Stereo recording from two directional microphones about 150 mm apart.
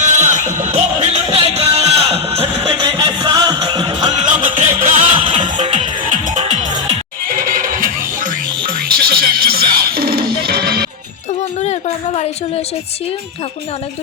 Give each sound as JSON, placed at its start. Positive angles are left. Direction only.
{"t": 0.0, "sound": "music", "side_deg": -55}
{"t": 2.6, "sound": "music", "side_deg": -30}
{"t": 4.1, "sound": "music", "side_deg": -55}
{"t": 7.3, "sound": "music", "side_deg": -70}
{"t": 8.8, "sound": "music", "side_deg": -90}
{"t": 11.6, "sound": "a sound", "side_deg": 45}